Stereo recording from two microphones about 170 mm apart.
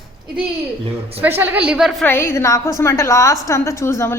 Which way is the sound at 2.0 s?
15° left (ahead or behind).